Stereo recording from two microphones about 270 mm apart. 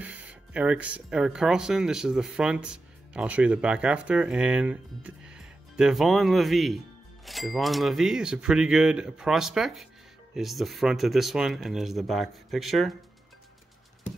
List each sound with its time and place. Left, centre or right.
0.0 s speech: centre